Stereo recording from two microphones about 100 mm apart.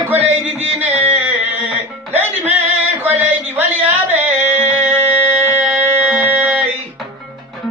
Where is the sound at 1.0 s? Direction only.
15° right (ahead or behind).